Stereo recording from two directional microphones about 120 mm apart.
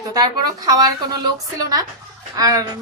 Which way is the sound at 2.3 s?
30° right (ahead or behind).